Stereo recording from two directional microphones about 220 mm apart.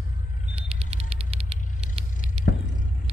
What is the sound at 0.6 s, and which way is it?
Mechanisms, 25° right (ahead or behind).